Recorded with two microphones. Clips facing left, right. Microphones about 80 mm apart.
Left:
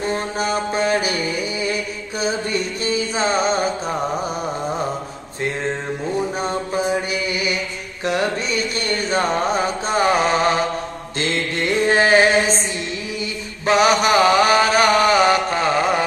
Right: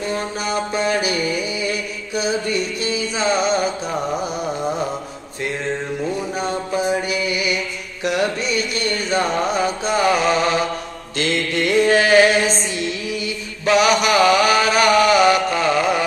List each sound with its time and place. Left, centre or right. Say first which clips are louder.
0.0 s mantra: left 2 dB; left
6.4 s mantra: even; left
13.7 s chant: even; left